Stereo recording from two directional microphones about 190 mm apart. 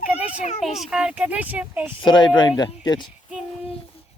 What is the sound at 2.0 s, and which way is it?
Speech, 25° left (ahead or behind).